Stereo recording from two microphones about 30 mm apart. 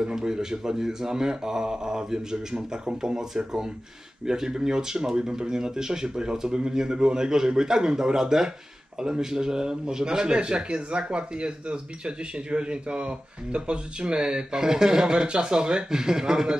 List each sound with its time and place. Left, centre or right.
0.0 s speech: right
14.6 s speech: right